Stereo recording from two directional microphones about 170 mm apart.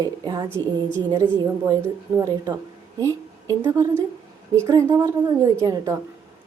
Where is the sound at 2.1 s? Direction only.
20° right (ahead or behind).